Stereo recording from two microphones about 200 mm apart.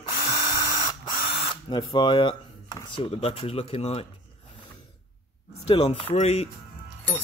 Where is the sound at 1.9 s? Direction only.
25° left (ahead or behind).